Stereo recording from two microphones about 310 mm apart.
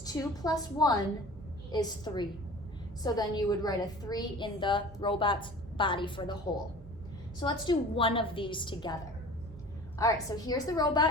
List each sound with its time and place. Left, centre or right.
0.0 s a woman's voice: centre
7.3 s a woman's voice: centre
10.0 s a woman's voice: centre